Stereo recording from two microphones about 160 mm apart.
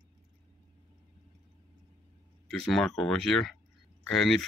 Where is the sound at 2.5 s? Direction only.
Centre (ahead or behind).